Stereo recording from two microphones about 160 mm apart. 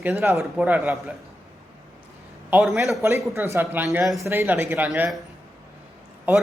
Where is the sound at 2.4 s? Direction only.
5° right (ahead or behind).